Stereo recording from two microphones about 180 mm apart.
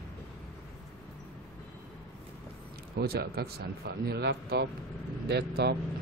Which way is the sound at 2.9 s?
60° right (ahead or behind).